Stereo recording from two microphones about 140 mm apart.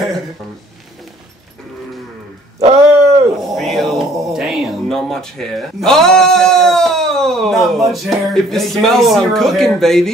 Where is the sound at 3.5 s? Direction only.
Centre (ahead or behind).